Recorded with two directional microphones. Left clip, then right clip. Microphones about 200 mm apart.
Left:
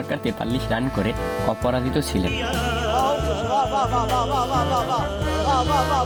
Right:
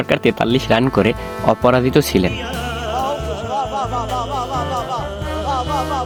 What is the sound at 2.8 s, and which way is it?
Music, centre (ahead or behind).